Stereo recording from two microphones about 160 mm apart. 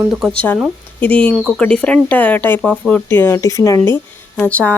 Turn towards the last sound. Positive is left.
turn(degrees=10)  # may be behind; listen again after turning